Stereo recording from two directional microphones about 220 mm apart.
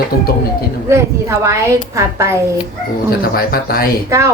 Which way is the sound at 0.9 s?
10° right (ahead or behind).